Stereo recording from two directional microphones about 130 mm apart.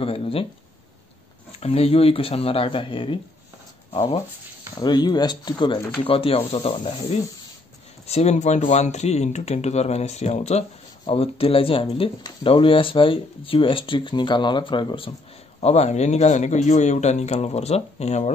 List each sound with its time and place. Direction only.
0.0 s speech: 50° left (ahead or behind)
1.6 s speech: 50° left (ahead or behind)
8.1 s speech: 55° left (ahead or behind)
11.1 s speech: 50° left (ahead or behind)
15.6 s speech: 55° left (ahead or behind)